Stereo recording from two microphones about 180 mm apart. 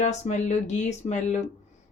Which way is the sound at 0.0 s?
40° left (ahead or behind).